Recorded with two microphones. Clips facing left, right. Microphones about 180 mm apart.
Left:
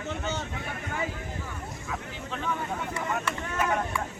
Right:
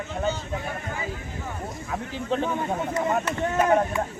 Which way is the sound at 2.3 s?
35° right (ahead or behind).